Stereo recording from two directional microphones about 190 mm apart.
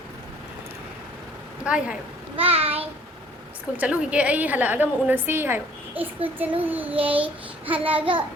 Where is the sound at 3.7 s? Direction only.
5° right (ahead or behind).